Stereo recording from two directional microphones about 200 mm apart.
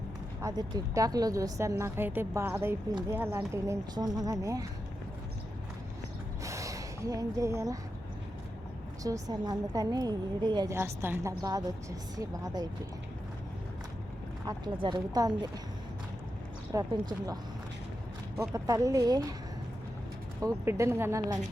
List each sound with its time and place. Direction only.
0.4 s a woman's voice: 20° right (ahead or behind)
6.4 s a sound: 15° right (ahead or behind)
9.0 s a woman's voice: 15° right (ahead or behind)
14.4 s speech: 20° right (ahead or behind)
16.7 s speech: 20° right (ahead or behind)
18.3 s a woman's voice: 15° right (ahead or behind)
20.7 s a woman's voice: 15° right (ahead or behind)